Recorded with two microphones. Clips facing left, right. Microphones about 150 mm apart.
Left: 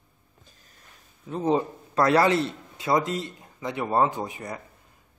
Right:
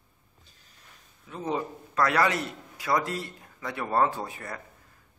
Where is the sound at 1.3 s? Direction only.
30° left (ahead or behind).